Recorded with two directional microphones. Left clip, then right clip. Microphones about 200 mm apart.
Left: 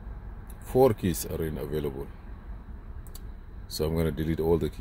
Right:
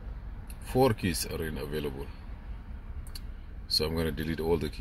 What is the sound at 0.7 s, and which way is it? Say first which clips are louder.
Speech: left 4 dB; 40° left (ahead or behind).